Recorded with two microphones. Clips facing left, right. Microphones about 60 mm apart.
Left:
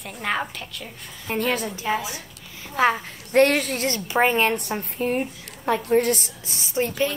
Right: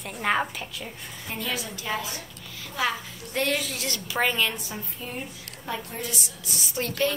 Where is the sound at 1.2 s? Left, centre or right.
Left.